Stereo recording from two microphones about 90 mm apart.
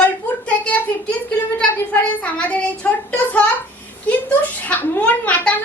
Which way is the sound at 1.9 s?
15° left (ahead or behind).